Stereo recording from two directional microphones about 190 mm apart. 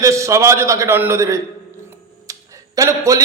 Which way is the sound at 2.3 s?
15° right (ahead or behind).